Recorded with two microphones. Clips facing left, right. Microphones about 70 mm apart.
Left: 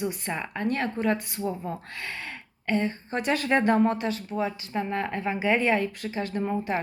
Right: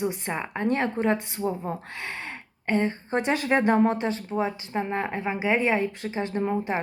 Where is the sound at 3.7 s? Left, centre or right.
Right.